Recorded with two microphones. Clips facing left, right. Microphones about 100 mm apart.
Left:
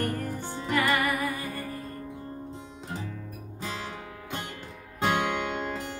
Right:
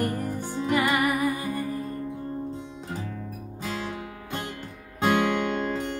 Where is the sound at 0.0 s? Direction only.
15° right (ahead or behind).